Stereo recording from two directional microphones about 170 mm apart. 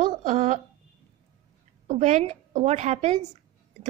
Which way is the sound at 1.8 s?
45° right (ahead or behind).